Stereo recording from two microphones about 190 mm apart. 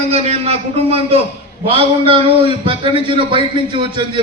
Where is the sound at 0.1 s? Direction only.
30° right (ahead or behind).